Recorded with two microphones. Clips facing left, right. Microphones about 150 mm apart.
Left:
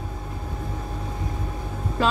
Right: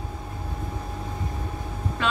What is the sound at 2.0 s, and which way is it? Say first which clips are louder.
Music: left 4 dB; 35° left (ahead or behind).